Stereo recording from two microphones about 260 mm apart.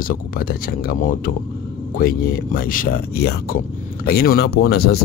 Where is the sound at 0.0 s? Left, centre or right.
Left.